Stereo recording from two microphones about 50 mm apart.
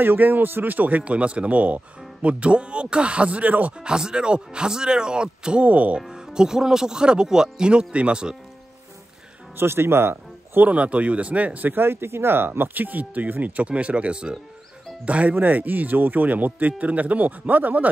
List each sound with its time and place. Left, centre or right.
0.0 s speech: right
3.8 s speech: centre
5.9 s speech: centre
9.6 s a man's voice: right
10.6 s speech: right
11.7 s speech: right
13.7 s speech: right